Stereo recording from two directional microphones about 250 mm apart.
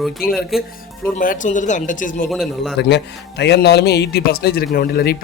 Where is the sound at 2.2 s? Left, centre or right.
Centre.